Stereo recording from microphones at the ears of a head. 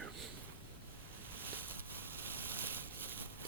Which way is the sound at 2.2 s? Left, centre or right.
Right.